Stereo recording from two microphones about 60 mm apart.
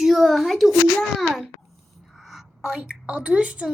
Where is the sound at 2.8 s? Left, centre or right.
Right.